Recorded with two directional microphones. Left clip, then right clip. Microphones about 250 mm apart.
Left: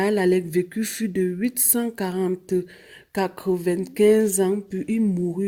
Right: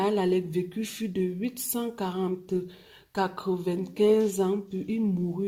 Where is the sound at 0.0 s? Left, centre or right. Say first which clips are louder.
Left 5 dB; left.